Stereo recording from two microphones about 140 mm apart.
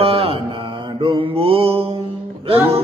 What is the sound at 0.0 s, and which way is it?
Mantra, 45° right (ahead or behind).